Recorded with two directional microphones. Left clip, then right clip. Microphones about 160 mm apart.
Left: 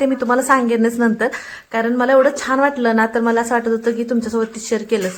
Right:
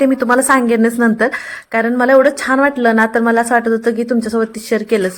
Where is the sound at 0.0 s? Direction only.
25° right (ahead or behind).